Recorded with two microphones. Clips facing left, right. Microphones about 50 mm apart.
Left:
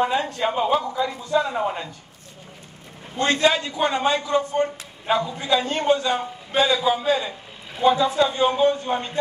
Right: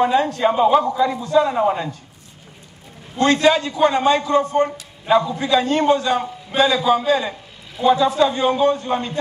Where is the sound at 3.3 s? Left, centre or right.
Right.